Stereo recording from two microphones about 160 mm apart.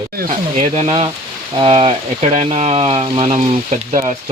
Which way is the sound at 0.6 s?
40° right (ahead or behind).